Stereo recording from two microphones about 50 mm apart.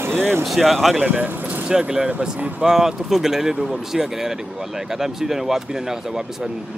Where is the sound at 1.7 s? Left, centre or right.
Centre.